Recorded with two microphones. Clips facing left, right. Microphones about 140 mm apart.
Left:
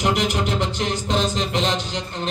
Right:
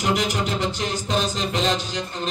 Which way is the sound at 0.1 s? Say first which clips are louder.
Left 1 dB; 65° left (ahead or behind).